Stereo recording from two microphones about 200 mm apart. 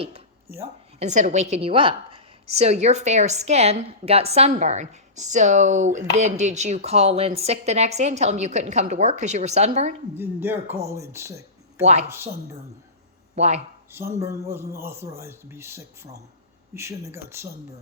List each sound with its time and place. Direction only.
0.9 s a woman's voice: 35° right (ahead or behind)
10.2 s speech: 10° right (ahead or behind)
11.8 s a woman's voice: 35° right (ahead or behind)
12.0 s speech: 15° right (ahead or behind)
13.3 s speech: 35° right (ahead or behind)
14.2 s speech: 15° right (ahead or behind)